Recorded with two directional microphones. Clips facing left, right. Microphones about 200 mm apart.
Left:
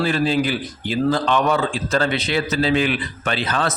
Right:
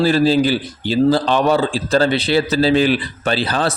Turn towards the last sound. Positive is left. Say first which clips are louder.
# right 4 dB
turn(degrees=-35)  # may be behind; listen again after turning